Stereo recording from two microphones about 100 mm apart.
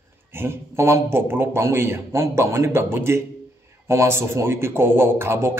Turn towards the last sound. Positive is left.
turn(degrees=-25)  # may be behind; listen again after turning